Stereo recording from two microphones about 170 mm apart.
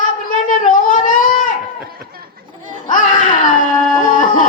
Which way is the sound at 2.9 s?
50° left (ahead or behind).